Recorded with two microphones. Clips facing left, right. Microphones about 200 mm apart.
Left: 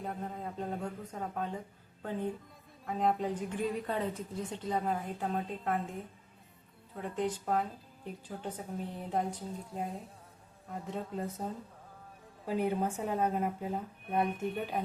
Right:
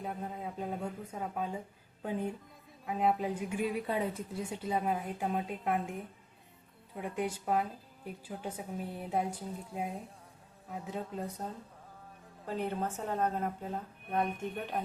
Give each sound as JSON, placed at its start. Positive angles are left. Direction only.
{"t": 0.0, "sound": "a woman's voice", "side_deg": -5}
{"t": 6.9, "sound": "speech", "side_deg": -10}
{"t": 12.5, "sound": "speech", "side_deg": 10}